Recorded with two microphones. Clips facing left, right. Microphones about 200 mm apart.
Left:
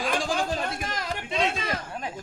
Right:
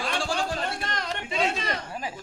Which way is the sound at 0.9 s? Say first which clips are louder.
Even; 5° left (ahead or behind).